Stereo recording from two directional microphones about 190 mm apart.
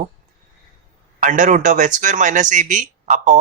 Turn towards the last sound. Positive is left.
turn(degrees=-40)  # may be behind; listen again after turning